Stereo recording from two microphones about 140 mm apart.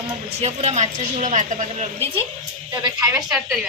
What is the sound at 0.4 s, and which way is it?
A woman's voice, 50° right (ahead or behind).